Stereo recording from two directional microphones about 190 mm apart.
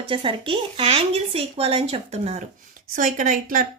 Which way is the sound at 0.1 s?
25° right (ahead or behind).